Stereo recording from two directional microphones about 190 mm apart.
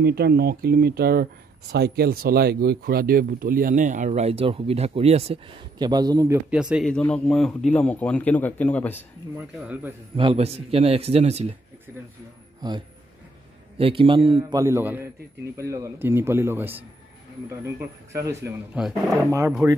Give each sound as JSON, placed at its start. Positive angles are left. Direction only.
{"t": 0.0, "sound": "speech", "side_deg": -55}
{"t": 9.4, "sound": "speech", "side_deg": -10}
{"t": 10.1, "sound": "speech", "side_deg": -30}
{"t": 13.7, "sound": "a man's voice", "side_deg": -30}
{"t": 14.6, "sound": "speech", "side_deg": -15}
{"t": 19.1, "sound": "speech", "side_deg": -15}